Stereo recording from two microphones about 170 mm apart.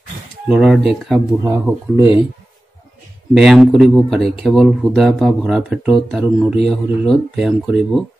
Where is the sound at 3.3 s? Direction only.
Centre (ahead or behind).